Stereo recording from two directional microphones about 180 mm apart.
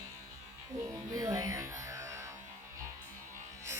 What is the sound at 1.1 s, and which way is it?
Music, 20° right (ahead or behind).